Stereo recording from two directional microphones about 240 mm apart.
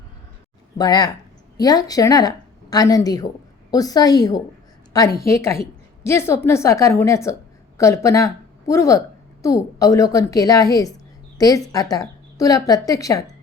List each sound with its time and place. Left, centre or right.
0.8 s a woman's voice: centre